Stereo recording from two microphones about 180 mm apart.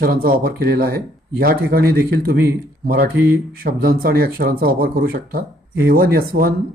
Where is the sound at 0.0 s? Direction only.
55° right (ahead or behind).